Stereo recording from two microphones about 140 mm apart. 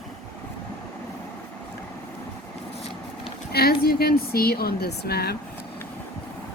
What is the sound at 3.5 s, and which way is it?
A woman's voice, 90° left.